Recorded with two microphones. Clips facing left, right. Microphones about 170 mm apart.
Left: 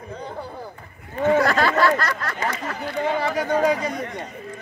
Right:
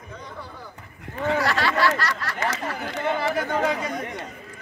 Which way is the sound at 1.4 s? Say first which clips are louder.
Left 1 dB; 45° left (ahead or behind).